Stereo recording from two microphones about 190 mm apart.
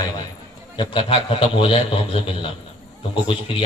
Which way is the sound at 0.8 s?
25° left (ahead or behind).